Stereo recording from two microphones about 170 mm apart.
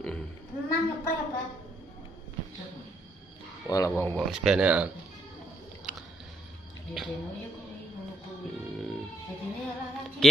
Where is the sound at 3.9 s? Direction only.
10° left (ahead or behind).